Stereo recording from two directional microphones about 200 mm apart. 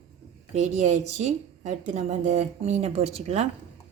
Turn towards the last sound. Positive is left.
turn(degrees=-35)  # may be behind; listen again after turning